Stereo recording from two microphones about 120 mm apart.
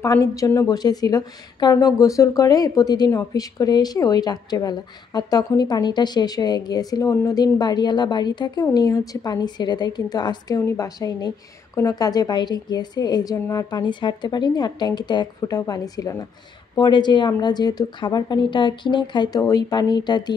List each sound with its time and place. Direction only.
0.0 s a woman's voice: 30° left (ahead or behind)